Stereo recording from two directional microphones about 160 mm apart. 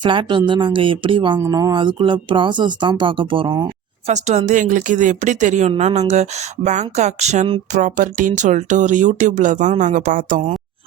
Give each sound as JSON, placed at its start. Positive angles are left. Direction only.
{"t": 0.0, "sound": "a woman's voice", "side_deg": -30}
{"t": 1.4, "sound": "speech", "side_deg": -20}
{"t": 4.0, "sound": "a woman's voice", "side_deg": -45}
{"t": 7.7, "sound": "a woman's voice", "side_deg": -50}